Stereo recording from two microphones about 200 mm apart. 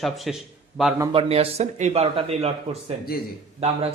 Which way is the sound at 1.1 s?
30° right (ahead or behind).